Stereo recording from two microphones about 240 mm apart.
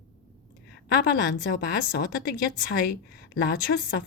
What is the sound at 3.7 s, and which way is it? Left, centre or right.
Speech, left.